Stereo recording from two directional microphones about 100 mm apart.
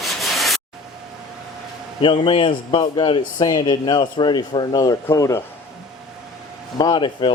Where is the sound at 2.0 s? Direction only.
55° left (ahead or behind).